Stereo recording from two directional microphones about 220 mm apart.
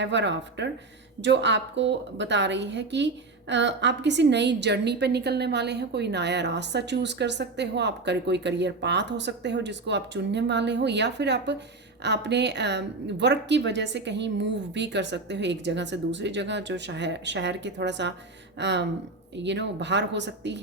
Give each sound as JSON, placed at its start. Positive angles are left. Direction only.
{"t": 0.0, "sound": "a woman's voice", "side_deg": -55}